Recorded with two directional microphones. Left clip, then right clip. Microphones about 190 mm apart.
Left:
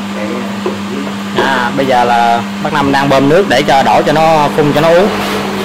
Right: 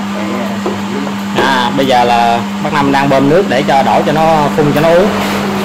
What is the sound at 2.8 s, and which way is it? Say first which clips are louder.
Speech: even; 15° left (ahead or behind).